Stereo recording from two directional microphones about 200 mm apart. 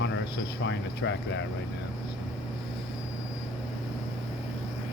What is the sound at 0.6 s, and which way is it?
Speech, 65° left (ahead or behind).